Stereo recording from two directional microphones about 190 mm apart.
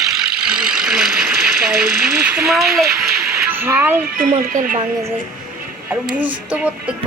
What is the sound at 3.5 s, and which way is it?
Speech, 10° right (ahead or behind).